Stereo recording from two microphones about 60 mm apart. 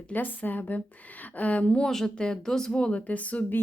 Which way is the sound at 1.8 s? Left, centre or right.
Centre.